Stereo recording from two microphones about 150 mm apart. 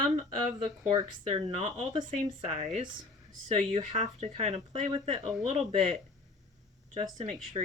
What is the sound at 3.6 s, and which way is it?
Speech, 50° right (ahead or behind).